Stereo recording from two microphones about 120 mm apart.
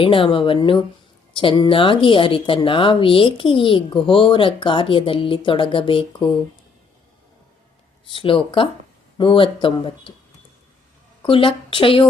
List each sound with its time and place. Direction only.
0.0 s speech: 45° left (ahead or behind)
8.0 s speech: 45° left (ahead or behind)
11.2 s a woman's voice: 45° left (ahead or behind)